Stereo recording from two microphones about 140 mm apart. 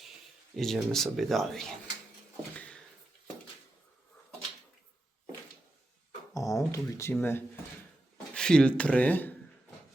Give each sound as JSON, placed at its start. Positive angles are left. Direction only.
{"t": 0.5, "sound": "speech", "side_deg": 0}
{"t": 6.3, "sound": "a sound", "side_deg": 25}
{"t": 6.7, "sound": "speech", "side_deg": 20}